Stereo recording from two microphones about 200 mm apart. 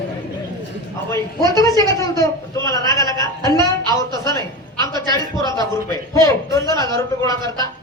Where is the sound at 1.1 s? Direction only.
15° left (ahead or behind).